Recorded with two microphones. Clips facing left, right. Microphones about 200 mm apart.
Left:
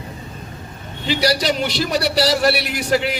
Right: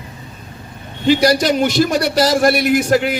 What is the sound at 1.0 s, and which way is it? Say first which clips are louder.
A man's voice: right 6 dB; 50° right (ahead or behind).